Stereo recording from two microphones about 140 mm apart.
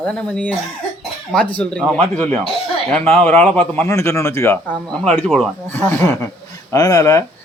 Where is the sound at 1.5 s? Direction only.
5° left (ahead or behind).